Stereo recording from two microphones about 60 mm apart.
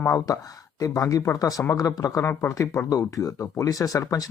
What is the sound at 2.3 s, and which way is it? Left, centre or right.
Speech, left.